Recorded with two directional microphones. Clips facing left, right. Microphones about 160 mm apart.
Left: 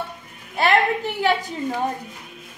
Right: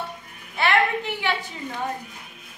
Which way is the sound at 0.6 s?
40° left (ahead or behind).